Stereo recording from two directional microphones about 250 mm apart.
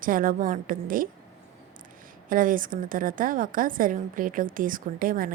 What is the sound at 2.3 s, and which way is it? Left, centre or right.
A woman's voice, right.